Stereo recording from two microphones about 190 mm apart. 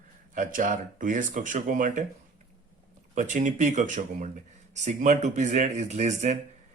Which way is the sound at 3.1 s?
40° right (ahead or behind).